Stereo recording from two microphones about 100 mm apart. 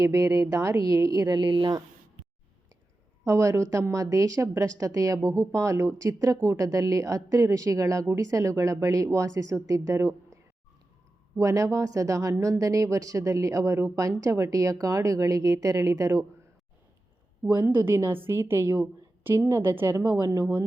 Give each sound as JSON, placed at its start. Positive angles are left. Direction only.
{"t": 0.0, "sound": "a woman's voice", "side_deg": -35}
{"t": 3.2, "sound": "a woman's voice", "side_deg": -35}
{"t": 11.3, "sound": "a woman's voice", "side_deg": -35}
{"t": 17.4, "sound": "a woman's voice", "side_deg": -20}
{"t": 20.1, "sound": "a woman's voice", "side_deg": -35}